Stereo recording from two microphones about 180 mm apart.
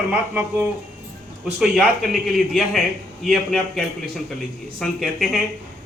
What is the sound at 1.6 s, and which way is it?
Speech, centre (ahead or behind).